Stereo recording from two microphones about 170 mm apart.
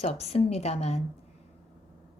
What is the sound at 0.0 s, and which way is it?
A woman's voice, 40° left (ahead or behind).